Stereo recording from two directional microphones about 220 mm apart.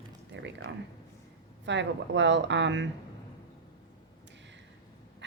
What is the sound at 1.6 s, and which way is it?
Speech, 55° right (ahead or behind).